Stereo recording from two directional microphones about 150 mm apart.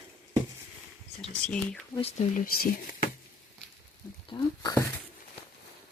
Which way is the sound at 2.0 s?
40° left (ahead or behind).